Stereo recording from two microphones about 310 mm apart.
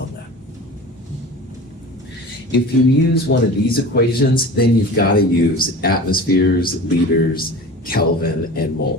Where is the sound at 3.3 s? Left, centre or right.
Left.